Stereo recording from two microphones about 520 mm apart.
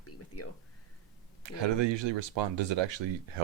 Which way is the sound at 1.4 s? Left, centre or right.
Right.